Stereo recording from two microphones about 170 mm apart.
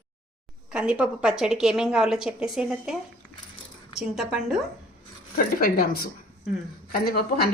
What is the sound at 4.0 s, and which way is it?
Speech, 5° right (ahead or behind).